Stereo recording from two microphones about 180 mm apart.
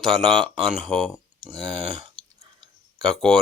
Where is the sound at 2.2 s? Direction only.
5° left (ahead or behind).